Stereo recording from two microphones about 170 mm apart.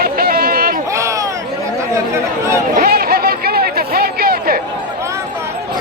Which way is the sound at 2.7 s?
60° right (ahead or behind).